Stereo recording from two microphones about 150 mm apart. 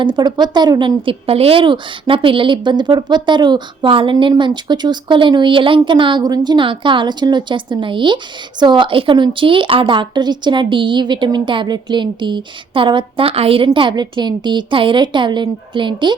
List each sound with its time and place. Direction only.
0.0 s a woman's voice: 30° right (ahead or behind)